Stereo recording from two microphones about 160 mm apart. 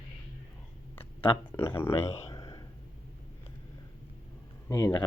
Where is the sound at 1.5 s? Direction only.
15° left (ahead or behind).